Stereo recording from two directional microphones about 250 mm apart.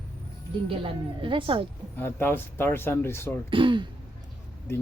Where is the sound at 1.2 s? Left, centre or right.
Right.